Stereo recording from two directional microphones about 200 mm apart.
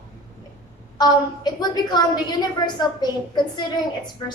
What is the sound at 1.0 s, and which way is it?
A woman's voice, 20° left (ahead or behind).